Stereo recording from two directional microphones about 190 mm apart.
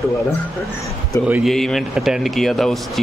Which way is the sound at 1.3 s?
Centre (ahead or behind).